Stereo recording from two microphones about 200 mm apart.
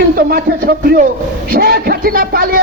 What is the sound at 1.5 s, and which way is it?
Speech, 50° right (ahead or behind).